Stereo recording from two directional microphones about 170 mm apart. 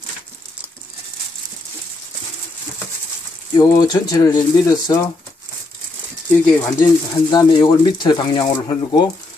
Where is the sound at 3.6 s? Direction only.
20° left (ahead or behind).